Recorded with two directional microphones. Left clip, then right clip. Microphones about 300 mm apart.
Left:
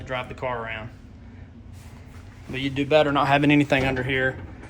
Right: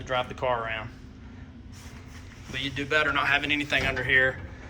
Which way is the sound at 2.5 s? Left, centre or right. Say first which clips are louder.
Left 6 dB; centre.